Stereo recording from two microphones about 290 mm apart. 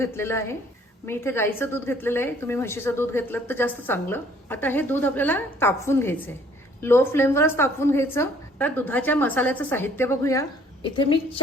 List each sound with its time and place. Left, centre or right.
0.0 s a woman's voice: centre